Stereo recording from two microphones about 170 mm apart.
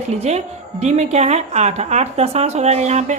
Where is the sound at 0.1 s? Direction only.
40° right (ahead or behind).